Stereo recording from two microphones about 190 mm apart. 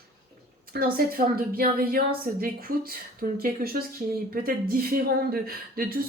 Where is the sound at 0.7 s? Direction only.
50° right (ahead or behind).